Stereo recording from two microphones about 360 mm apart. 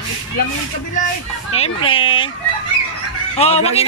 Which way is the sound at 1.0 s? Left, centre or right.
Left.